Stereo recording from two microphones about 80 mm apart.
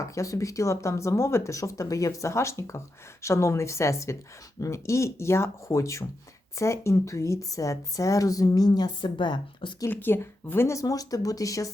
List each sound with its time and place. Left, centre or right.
0.0 s a woman's voice: left
9.9 s a woman's voice: left